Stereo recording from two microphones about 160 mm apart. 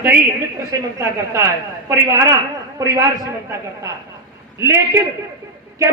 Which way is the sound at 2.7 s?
20° right (ahead or behind).